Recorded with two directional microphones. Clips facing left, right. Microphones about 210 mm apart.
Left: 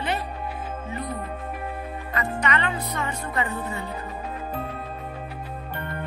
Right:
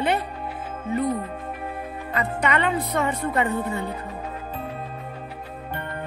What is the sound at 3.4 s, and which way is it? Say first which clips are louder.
Speech: right 5 dB; 60° right (ahead or behind).